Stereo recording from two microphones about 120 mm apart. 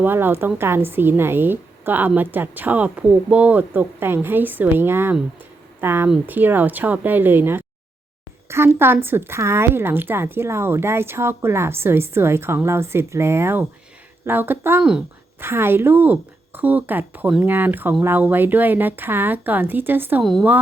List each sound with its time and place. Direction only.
0.0 s a woman's voice: 20° right (ahead or behind)